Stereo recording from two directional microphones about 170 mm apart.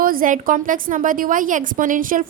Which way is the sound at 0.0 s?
55° right (ahead or behind).